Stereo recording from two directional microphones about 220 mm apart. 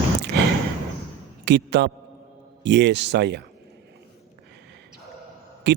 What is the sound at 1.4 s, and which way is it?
A man's voice, 50° right (ahead or behind).